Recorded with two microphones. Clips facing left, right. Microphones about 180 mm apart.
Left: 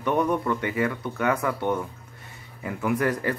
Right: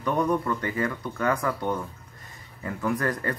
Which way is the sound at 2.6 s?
10° left (ahead or behind).